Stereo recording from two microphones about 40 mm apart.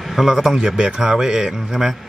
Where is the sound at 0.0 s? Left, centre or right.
Centre.